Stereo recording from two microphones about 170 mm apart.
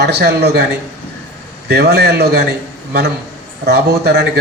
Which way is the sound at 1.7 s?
70° right (ahead or behind).